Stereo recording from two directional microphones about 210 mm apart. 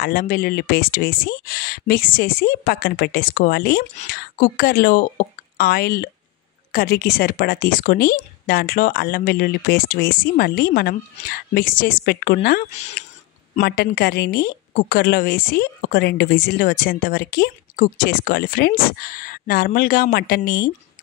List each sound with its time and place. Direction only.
0.0 s a woman's voice: 45° left (ahead or behind)